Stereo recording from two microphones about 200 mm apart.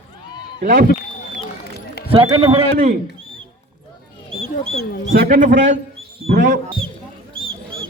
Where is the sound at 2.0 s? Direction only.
30° right (ahead or behind).